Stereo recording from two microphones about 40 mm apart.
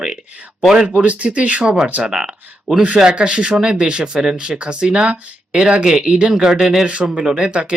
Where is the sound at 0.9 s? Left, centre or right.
Right; by 6.8 s centre.